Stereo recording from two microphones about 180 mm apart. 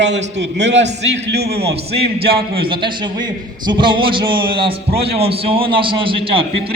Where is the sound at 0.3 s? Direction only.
75° right (ahead or behind).